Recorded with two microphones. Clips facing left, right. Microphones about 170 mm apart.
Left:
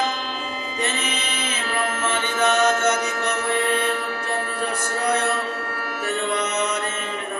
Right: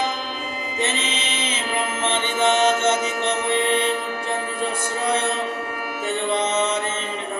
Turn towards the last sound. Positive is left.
turn(degrees=-25)  # may be behind; listen again after turning